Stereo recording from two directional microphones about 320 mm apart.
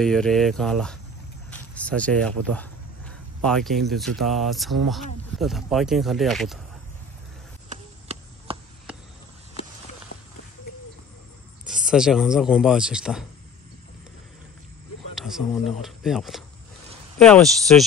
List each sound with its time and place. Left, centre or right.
0.0 s speech: centre
1.5 s a sound: centre
3.4 s speech: centre
7.7 s chop: centre
9.6 s walk: centre
11.6 s speech: centre
15.1 s speech: centre